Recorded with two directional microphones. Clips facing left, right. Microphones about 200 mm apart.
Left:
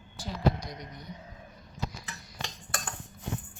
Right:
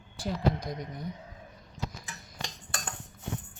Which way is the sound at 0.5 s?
55° right (ahead or behind).